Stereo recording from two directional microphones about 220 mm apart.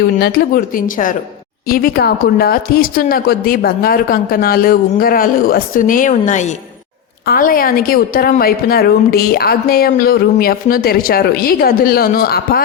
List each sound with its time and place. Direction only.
0.2 s a woman's voice: 45° left (ahead or behind)